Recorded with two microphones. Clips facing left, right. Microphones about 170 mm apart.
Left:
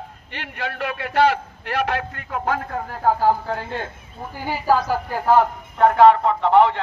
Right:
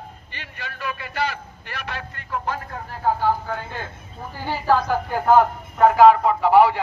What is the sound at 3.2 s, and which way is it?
Speech, 35° left (ahead or behind).